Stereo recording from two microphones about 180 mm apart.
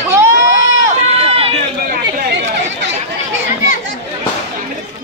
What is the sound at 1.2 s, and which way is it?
Run, 35° right (ahead or behind).